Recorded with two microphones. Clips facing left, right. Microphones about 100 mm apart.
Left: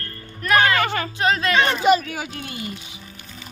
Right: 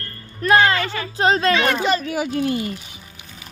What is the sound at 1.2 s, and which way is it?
Speech, 30° right (ahead or behind).